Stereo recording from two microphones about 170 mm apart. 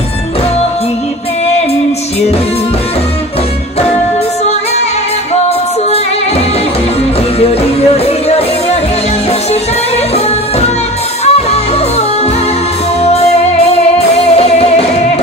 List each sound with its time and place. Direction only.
7.3 s music: 35° left (ahead or behind)
11.2 s music: 40° left (ahead or behind)
13.0 s music: 40° left (ahead or behind)